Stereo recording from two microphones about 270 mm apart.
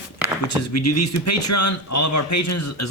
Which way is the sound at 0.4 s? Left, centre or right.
Left.